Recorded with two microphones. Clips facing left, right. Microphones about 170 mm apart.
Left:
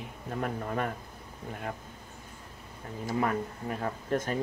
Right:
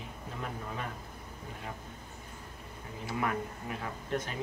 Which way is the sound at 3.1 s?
35° left (ahead or behind).